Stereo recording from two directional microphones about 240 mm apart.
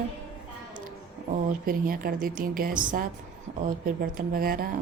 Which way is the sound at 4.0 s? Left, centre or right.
Right.